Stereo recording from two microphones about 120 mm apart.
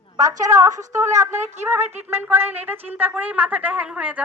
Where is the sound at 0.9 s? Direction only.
25° right (ahead or behind).